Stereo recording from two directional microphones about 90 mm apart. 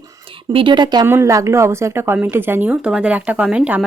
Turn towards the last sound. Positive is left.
turn(degrees=-10)  # may be behind; listen again after turning